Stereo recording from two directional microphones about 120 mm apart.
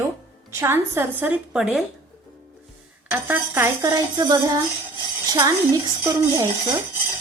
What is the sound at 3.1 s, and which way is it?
Speech, 15° right (ahead or behind).